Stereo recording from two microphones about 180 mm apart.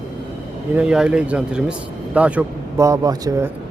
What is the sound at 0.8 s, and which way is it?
A man's voice, 5° right (ahead or behind).